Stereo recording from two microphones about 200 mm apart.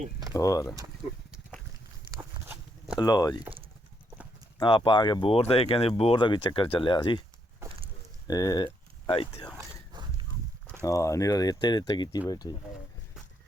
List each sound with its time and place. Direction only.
0.3 s speech: 15° left (ahead or behind)
1.3 s livestock: 5° right (ahead or behind)
2.0 s walk: 20° right (ahead or behind)
3.0 s speech: 20° left (ahead or behind)
4.6 s speech: 25° left (ahead or behind)
8.3 s speech: 20° left (ahead or behind)
9.6 s walk: 20° right (ahead or behind)
10.8 s speech: 15° left (ahead or behind)